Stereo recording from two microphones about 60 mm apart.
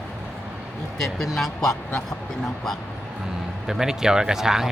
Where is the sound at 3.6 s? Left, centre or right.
Centre.